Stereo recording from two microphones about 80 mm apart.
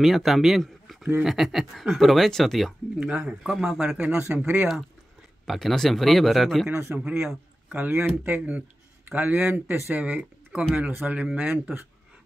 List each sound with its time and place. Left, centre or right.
0.0 s speech: centre
3.0 s speech: centre
5.4 s speech: centre
6.7 s speech: right
7.1 s speech: centre
7.7 s speech: right
8.4 s speech: centre